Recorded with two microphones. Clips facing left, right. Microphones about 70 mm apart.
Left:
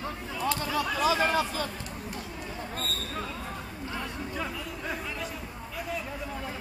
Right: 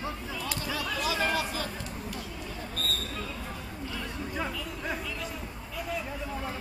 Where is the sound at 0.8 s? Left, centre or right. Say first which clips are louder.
Left 4 dB; left.